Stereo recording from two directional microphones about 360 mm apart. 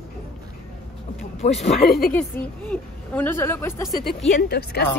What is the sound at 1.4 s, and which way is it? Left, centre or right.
Speech, centre.